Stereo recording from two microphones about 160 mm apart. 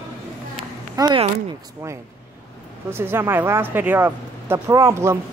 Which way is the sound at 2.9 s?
15° right (ahead or behind).